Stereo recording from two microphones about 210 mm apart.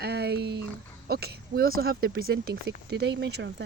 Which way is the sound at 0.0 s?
50° right (ahead or behind).